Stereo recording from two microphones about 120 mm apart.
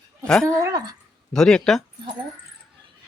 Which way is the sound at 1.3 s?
5° left (ahead or behind).